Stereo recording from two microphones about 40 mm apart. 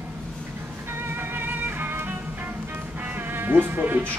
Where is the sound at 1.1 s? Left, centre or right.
Right.